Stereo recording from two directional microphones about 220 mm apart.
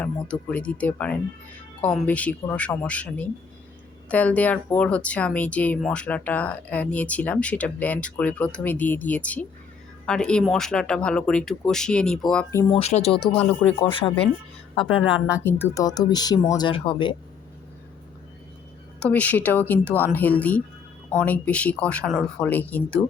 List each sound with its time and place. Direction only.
0.0 s speech: 5° left (ahead or behind)
12.7 s speech: 30° left (ahead or behind)
13.3 s speech: 5° left (ahead or behind)
14.0 s speech: 20° left (ahead or behind)
19.0 s speech: 5° left (ahead or behind)